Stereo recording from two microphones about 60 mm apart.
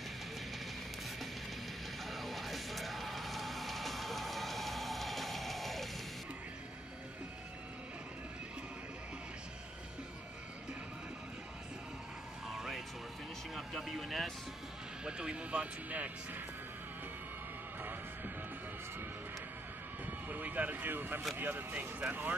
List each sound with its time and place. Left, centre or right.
2.0 s music: centre
12.4 s music: centre
13.6 s speech: centre
15.0 s speech: centre
20.1 s a sound: right
21.4 s speech: right